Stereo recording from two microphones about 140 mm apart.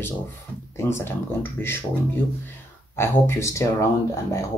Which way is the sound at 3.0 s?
20° left (ahead or behind).